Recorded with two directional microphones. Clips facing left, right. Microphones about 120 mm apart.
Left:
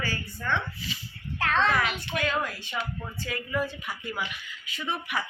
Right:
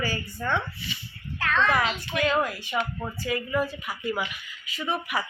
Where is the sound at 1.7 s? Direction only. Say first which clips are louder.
Right 2 dB; 20° right (ahead or behind).